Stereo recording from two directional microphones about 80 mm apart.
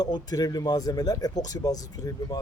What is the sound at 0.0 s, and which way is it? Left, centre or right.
Speech, left.